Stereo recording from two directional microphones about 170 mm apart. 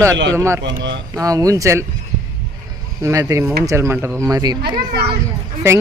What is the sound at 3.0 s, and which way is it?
Speech, 20° right (ahead or behind).